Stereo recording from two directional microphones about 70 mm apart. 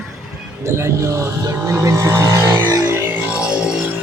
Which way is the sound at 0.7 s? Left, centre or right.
Right.